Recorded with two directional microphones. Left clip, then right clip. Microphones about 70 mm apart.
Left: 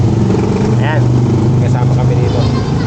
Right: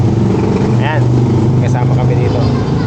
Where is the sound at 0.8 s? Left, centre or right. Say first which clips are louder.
Even; centre.